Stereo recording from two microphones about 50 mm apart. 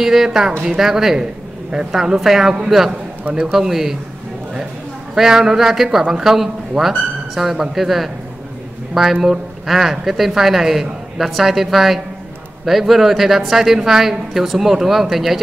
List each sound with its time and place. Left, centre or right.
0.0 s a woman's voice: centre
5.1 s a woman's voice: centre